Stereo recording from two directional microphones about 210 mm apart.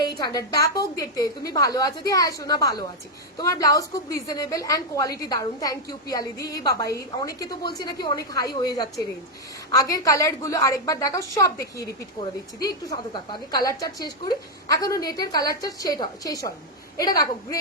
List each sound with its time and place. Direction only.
0.2 s a woman's voice: 20° left (ahead or behind)